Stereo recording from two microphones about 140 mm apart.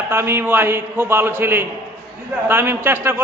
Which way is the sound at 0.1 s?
15° right (ahead or behind).